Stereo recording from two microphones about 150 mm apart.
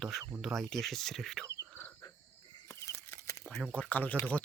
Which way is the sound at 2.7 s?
20° left (ahead or behind).